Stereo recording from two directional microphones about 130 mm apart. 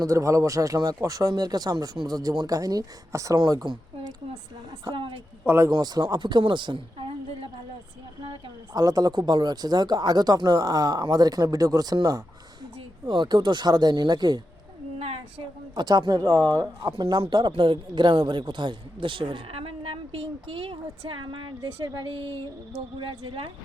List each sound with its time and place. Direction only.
0.0 s speech: 25° right (ahead or behind)
4.9 s speech: 40° right (ahead or behind)
5.5 s speech: 20° right (ahead or behind)
5.7 s speech: 30° right (ahead or behind)
8.7 s speech: 30° right (ahead or behind)
14.9 s a sound: 50° right (ahead or behind)
15.7 s speech: 35° right (ahead or behind)